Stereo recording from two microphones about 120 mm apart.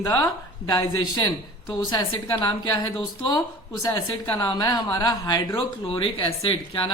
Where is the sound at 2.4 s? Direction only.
35° left (ahead or behind).